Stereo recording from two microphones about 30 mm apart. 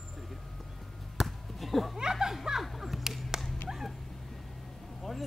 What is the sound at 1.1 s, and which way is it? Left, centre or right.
Chop, centre.